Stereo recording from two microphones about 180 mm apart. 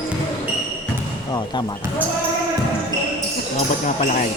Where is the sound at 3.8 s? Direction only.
45° left (ahead or behind).